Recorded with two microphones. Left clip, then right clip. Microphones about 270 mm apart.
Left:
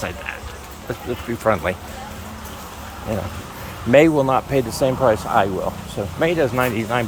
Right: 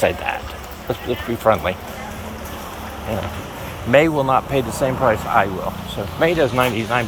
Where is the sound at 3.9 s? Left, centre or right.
Left.